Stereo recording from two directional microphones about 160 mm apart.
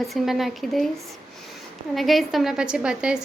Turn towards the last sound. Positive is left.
turn(degrees=-5)  # may be behind; listen again after turning